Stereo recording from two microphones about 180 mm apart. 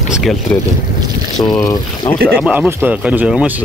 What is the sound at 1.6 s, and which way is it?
Speech, 20° left (ahead or behind).